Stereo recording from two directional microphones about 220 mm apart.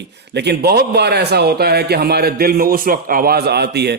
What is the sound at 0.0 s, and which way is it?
A man's voice, 50° right (ahead or behind).